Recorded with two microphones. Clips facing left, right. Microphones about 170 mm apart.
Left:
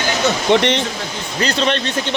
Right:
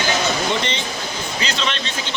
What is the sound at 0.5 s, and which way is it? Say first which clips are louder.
Speech: left 9 dB; 70° left (ahead or behind).